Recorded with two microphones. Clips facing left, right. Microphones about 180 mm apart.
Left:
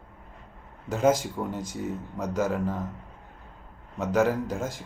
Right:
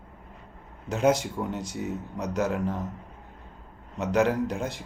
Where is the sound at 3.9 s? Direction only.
5° left (ahead or behind).